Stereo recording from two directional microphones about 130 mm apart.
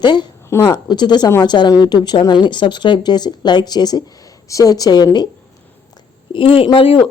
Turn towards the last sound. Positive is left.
turn(degrees=45)  # may be behind; listen again after turning